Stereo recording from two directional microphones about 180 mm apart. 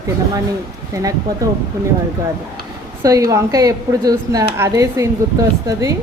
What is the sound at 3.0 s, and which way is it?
Speech, 20° right (ahead or behind).